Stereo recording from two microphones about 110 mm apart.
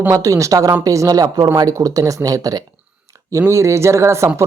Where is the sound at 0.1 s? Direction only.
30° right (ahead or behind).